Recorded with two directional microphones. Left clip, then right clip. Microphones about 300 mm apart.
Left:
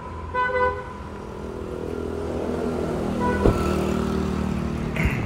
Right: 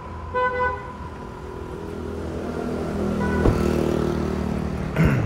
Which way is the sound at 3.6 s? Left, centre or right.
Right.